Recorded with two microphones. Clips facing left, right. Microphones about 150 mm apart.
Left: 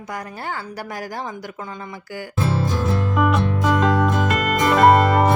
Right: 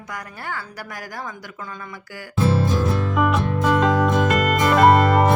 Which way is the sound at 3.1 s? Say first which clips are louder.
Left 3 dB; centre (ahead or behind).